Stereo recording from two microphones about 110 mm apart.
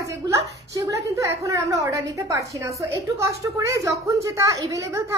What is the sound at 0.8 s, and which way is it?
A woman's voice, 30° right (ahead or behind).